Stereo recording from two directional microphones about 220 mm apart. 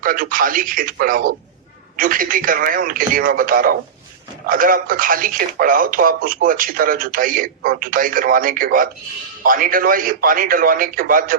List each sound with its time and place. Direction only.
0.0 s speech: 40° right (ahead or behind)